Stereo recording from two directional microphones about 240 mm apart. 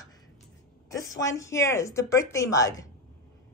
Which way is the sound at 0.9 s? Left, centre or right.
Centre.